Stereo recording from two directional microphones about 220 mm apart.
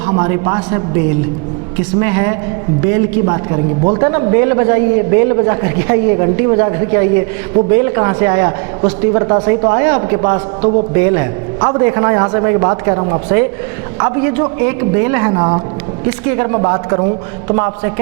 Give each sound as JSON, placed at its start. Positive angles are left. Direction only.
{"t": 0.1, "sound": "a man's voice", "side_deg": -20}